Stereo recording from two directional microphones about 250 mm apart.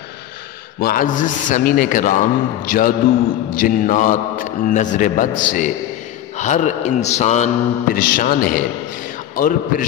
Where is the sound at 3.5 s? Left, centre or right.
Left.